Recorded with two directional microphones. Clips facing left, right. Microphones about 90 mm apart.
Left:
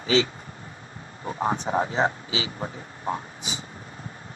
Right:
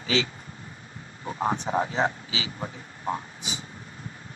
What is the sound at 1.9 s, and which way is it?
Speech, 30° left (ahead or behind).